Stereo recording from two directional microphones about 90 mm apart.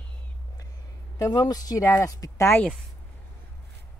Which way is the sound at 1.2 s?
45° left (ahead or behind).